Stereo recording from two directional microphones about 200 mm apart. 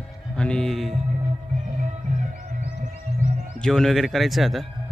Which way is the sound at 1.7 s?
40° right (ahead or behind).